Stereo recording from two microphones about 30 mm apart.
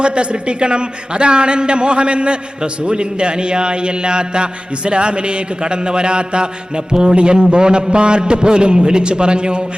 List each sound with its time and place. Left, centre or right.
0.0 s a man's voice: right